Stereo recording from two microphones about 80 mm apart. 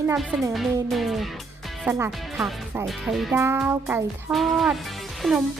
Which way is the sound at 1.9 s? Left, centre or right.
Right.